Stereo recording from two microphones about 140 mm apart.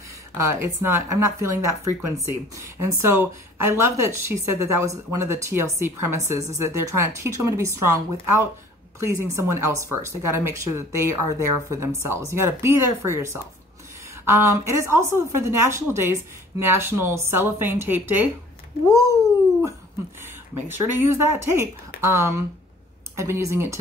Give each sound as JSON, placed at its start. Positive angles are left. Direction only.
{"t": 0.4, "sound": "speech", "side_deg": -20}
{"t": 20.6, "sound": "speech", "side_deg": -15}